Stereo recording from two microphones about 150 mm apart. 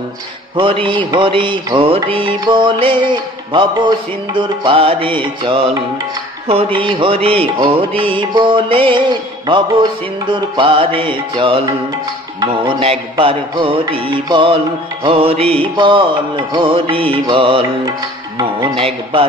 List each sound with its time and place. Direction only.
0.6 s music: 35° right (ahead or behind)
10.2 s music: 30° right (ahead or behind)